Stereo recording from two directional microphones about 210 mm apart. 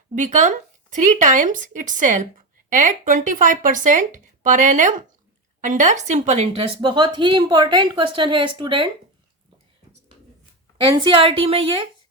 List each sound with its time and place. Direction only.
0.2 s speech: 35° right (ahead or behind)
10.9 s speech: 25° right (ahead or behind)